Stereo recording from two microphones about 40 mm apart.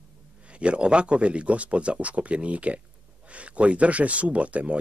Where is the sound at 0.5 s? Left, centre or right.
Right.